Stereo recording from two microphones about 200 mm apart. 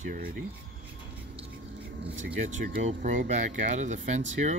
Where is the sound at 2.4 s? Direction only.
40° right (ahead or behind).